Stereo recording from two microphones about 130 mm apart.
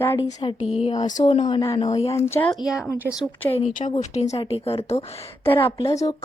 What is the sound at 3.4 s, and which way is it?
Speech, 55° left (ahead or behind).